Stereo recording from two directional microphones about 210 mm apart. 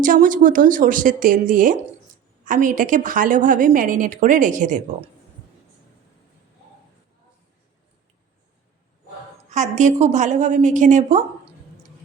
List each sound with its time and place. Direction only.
0.0 s a woman's voice: 40° right (ahead or behind)
9.5 s a woman's voice: 35° right (ahead or behind)